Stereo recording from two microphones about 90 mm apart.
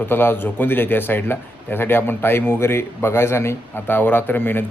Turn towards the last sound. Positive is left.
turn(degrees=20)  # may be behind; listen again after turning